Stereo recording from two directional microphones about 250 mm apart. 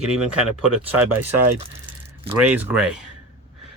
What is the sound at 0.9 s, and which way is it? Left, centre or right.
Speech, right.